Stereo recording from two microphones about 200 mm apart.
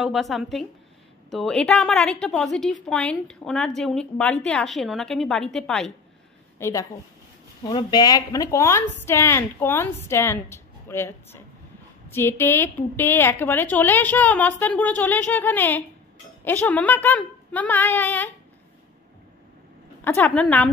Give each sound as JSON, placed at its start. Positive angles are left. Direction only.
{"t": 0.0, "sound": "a woman's voice", "side_deg": 0}
{"t": 6.6, "sound": "a woman's voice", "side_deg": 15}
{"t": 20.0, "sound": "a woman's voice", "side_deg": 10}